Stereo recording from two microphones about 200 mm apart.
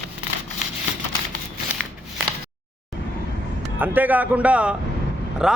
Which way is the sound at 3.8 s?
10° right (ahead or behind).